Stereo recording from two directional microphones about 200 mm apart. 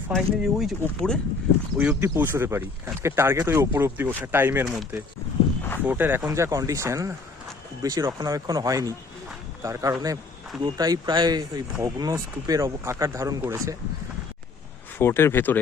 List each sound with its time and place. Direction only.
0.1 s speech: centre (ahead or behind)
1.8 s speech: 10° right (ahead or behind)
14.9 s speech: 10° left (ahead or behind)